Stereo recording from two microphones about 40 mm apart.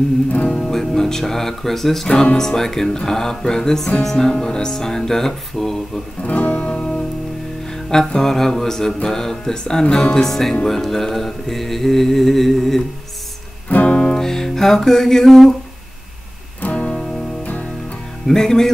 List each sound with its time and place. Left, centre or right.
0.3 s music: left
0.7 s speech: centre
4.3 s speech: centre
6.2 s music: left
6.5 s music: left
8.1 s speech: centre
10.7 s mantra: centre
13.8 s music: left
14.1 s music: centre
16.6 s music: left
18.3 s speech: centre